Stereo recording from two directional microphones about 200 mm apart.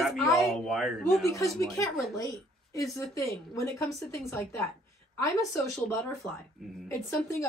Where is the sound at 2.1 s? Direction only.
15° left (ahead or behind).